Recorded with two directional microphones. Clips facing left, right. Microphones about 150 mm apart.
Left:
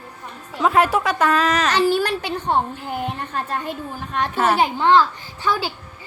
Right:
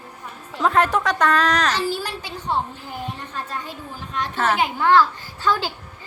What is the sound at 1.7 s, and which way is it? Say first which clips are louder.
A woman's voice: left 7 dB; 65° left (ahead or behind).